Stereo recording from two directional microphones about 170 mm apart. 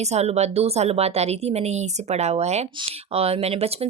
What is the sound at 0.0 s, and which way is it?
Speech, 40° right (ahead or behind).